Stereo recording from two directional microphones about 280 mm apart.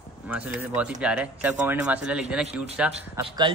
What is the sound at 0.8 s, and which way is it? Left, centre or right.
Speech, centre.